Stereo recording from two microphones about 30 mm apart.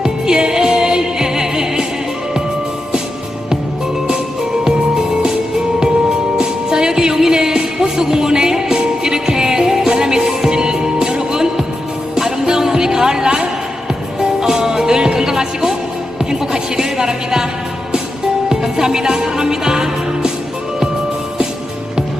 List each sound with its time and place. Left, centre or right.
0.0 s music: right
4.6 s music: right
16.4 s a sound: centre
18.4 s music: centre